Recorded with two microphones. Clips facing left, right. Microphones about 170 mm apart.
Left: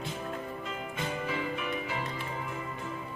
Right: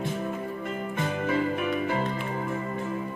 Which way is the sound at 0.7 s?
50° right (ahead or behind).